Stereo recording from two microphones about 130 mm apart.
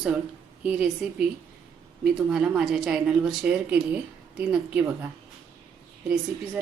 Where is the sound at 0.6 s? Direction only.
10° right (ahead or behind).